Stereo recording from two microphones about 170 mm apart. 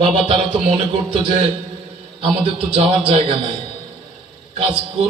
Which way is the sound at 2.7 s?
30° right (ahead or behind).